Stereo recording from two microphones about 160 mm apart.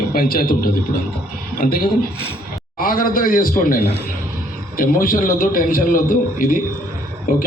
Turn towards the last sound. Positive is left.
turn(degrees=55)  # may be behind; listen again after turning